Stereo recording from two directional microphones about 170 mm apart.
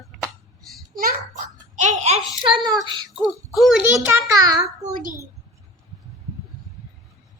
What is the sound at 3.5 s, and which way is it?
Speech, centre (ahead or behind).